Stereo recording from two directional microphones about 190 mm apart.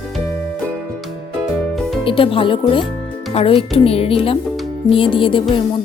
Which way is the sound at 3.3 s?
30° left (ahead or behind).